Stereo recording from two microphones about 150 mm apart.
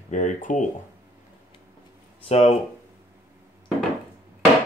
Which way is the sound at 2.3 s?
40° left (ahead or behind).